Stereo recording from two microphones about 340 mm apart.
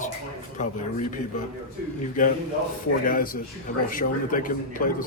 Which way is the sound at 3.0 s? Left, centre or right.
Left.